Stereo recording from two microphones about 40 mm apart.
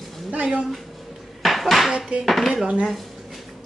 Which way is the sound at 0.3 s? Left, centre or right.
Right.